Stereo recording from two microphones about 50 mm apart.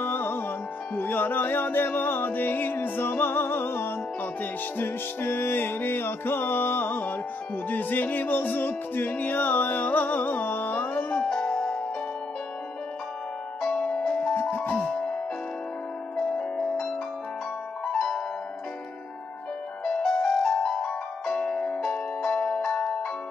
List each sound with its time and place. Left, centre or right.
0.0 s music: left
4.2 s music: left
13.7 s music: centre
14.3 s music: left
16.2 s music: centre
17.9 s keyboard: centre
19.8 s music: centre
21.4 s music: left